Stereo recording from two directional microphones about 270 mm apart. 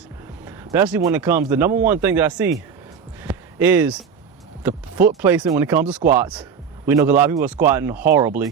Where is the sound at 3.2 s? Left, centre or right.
Centre.